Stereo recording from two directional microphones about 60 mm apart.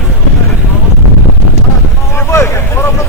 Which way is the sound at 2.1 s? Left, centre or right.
Left.